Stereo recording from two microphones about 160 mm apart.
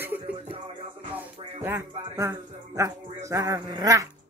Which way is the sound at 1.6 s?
15° right (ahead or behind).